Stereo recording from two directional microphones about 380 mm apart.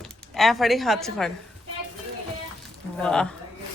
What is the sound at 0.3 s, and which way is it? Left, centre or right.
Speech, centre.